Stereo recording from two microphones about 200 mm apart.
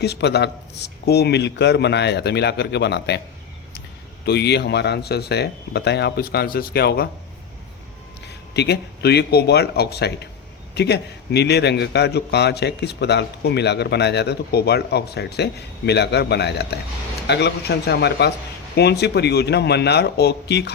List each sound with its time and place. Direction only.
0.0 s a man's voice: 55° left (ahead or behind)
4.3 s a man's voice: 55° left (ahead or behind)
8.5 s a man's voice: 55° left (ahead or behind)